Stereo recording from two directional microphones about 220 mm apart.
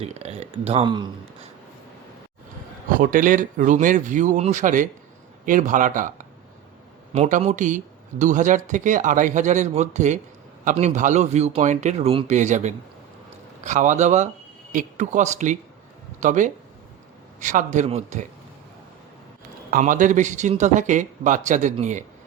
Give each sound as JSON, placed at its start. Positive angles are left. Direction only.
{"t": 0.0, "sound": "speech", "side_deg": -30}
{"t": 3.0, "sound": "speech", "side_deg": -40}
{"t": 19.7, "sound": "speech", "side_deg": -35}